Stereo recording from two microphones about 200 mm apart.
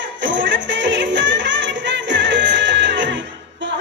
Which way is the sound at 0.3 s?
65° right (ahead or behind).